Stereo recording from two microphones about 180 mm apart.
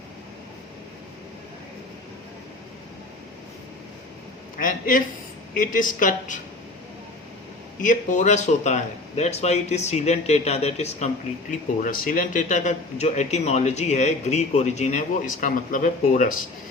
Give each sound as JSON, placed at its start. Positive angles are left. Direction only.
{"t": 4.6, "sound": "speech", "side_deg": 50}
{"t": 7.8, "sound": "a man's voice", "side_deg": 45}
{"t": 11.8, "sound": "a man's voice", "side_deg": 50}